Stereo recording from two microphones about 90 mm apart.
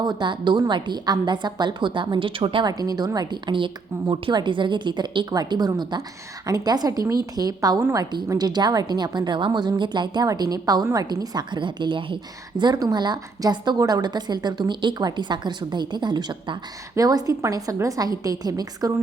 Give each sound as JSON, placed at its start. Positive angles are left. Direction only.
{"t": 0.0, "sound": "a woman's voice", "side_deg": -55}
{"t": 2.6, "sound": "a woman's voice", "side_deg": -45}
{"t": 16.9, "sound": "a woman's voice", "side_deg": -45}